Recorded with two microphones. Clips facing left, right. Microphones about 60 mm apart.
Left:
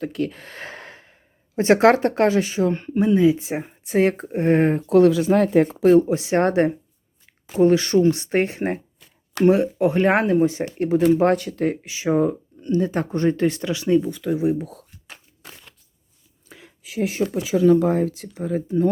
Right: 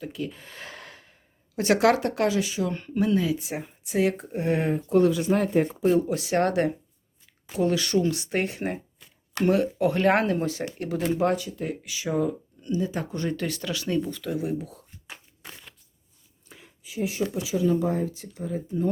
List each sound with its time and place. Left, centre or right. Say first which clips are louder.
0.0 s speech: left 8 dB; left
0.6 s gasp: left 5 dB; left
1.5 s speech: left 6 dB; left
2.9 s speech: left 7 dB; left
4.9 s speech: left 6 dB; left
5.8 s speech: left 9 dB; left
6.1 s speech: left 4 dB; left
9.5 s speech: left 4 dB; left
11.0 s speech: left 7 dB; left
11.3 s speech: left 8 dB; left
11.8 s speech: left 4 dB; left
13.8 s speech: left 9 dB; centre
16.6 s speech: left 5 dB; left